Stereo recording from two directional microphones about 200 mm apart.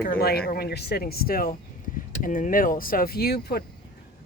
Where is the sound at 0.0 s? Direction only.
50° left (ahead or behind).